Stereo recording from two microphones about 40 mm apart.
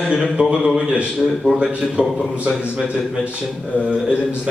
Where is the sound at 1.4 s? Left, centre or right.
Right.